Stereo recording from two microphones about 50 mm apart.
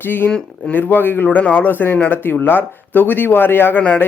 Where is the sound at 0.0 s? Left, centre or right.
Left.